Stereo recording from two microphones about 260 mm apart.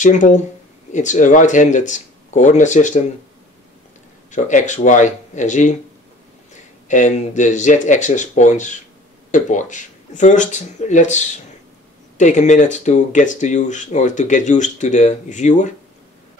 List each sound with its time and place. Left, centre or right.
0.0 s speech: left
4.3 s speech: left
6.9 s speech: left